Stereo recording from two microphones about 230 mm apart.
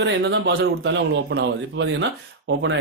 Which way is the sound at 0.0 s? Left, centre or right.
Right.